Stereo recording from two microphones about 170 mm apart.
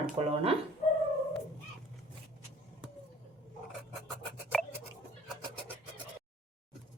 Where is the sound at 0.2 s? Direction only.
35° right (ahead or behind).